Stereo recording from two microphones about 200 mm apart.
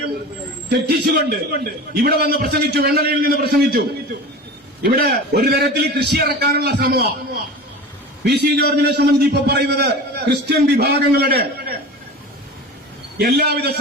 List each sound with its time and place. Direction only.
0.7 s a man's voice: 50° right (ahead or behind)
8.2 s a man's voice: 55° right (ahead or behind)
13.1 s a man's voice: 50° right (ahead or behind)